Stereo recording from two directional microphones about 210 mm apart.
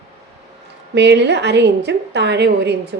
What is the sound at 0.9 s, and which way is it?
A woman's voice, 55° right (ahead or behind).